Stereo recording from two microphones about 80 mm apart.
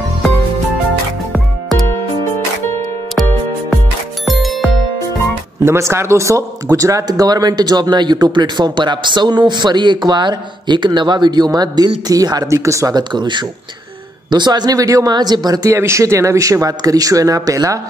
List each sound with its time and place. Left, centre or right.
3.2 s music: centre
5.6 s speech: right
12.4 s speech: right
12.9 s speech: right
15.1 s speech: right
15.7 s speech: right